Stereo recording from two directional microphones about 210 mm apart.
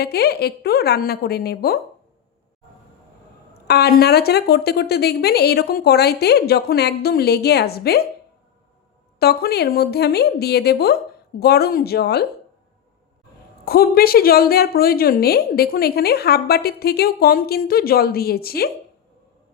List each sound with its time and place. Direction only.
0.0 s a woman's voice: 50° left (ahead or behind)
3.7 s a woman's voice: 50° left (ahead or behind)
9.1 s a woman's voice: 50° left (ahead or behind)
13.7 s a woman's voice: 45° left (ahead or behind)